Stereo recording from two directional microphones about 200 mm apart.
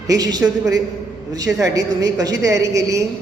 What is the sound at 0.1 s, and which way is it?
Speech, 20° right (ahead or behind).